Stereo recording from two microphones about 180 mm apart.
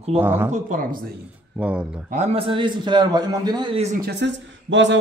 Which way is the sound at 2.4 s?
25° right (ahead or behind).